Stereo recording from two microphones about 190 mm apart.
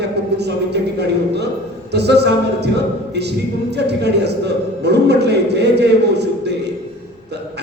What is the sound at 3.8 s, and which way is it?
A man's voice, 60° right (ahead or behind).